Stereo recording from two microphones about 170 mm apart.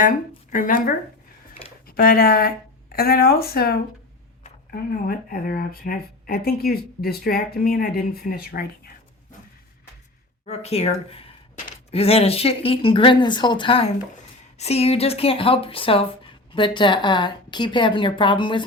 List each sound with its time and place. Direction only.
0.5 s speech: 50° left (ahead or behind)
10.4 s speech: 40° left (ahead or behind)